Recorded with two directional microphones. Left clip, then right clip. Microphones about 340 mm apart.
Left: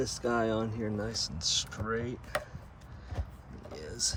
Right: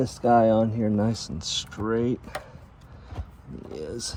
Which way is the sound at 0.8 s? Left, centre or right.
Right.